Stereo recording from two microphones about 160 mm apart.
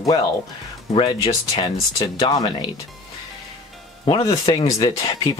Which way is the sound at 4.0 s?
35° left (ahead or behind).